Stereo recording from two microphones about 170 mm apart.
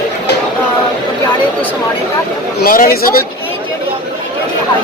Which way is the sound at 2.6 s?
55° left (ahead or behind).